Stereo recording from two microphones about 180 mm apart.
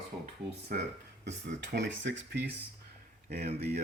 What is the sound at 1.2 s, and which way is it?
Speech, 75° right (ahead or behind).